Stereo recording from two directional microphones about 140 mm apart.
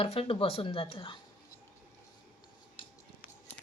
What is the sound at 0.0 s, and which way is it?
Speech, 45° left (ahead or behind).